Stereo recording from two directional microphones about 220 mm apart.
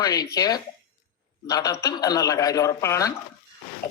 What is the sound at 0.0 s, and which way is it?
A man's voice, 15° left (ahead or behind).